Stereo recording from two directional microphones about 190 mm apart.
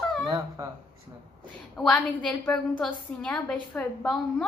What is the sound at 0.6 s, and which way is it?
Speech, 20° right (ahead or behind).